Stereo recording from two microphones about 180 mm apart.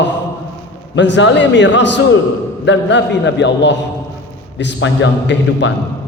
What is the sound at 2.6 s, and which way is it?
A man's voice, 90° left.